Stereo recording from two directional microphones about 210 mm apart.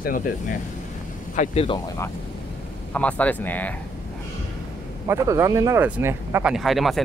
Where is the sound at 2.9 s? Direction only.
5° left (ahead or behind).